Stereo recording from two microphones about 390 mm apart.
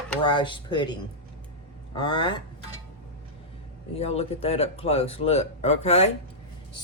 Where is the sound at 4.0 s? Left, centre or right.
Centre.